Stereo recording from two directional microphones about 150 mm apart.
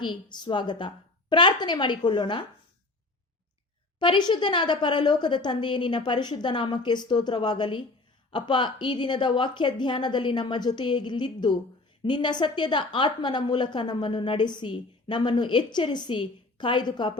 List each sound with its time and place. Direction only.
0.0 s a woman's voice: 30° left (ahead or behind)
4.0 s a woman's voice: 30° left (ahead or behind)